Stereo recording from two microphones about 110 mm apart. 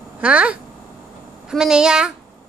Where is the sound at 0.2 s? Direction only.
10° right (ahead or behind).